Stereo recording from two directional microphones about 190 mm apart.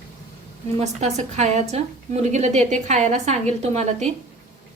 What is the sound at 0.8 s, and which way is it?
A woman's voice, 35° right (ahead or behind).